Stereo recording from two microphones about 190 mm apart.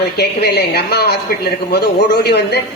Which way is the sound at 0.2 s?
60° left (ahead or behind).